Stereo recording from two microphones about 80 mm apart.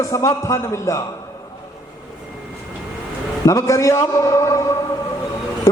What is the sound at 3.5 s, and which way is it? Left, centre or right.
A man's voice, left.